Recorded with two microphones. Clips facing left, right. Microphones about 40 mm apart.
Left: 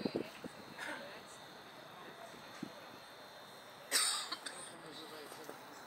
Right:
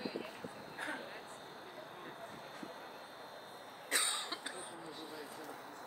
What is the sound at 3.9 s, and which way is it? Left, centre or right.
Cough, right.